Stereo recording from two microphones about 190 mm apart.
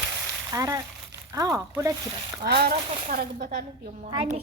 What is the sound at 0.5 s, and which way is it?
Speech, 15° right (ahead or behind).